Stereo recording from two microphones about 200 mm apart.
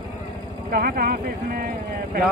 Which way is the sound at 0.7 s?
45° right (ahead or behind).